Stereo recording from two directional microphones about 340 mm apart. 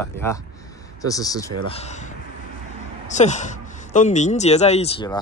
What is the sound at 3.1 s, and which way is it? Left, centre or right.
Speech, left.